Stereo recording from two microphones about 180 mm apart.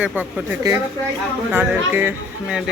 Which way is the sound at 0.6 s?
20° right (ahead or behind).